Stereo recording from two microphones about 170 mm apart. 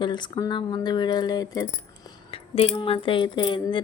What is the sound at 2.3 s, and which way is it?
A woman's voice, 35° left (ahead or behind).